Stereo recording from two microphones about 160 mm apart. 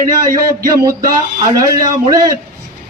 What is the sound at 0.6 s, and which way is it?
A man's voice, 20° right (ahead or behind).